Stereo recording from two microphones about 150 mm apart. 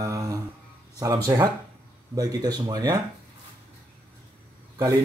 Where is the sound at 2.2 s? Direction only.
25° right (ahead or behind).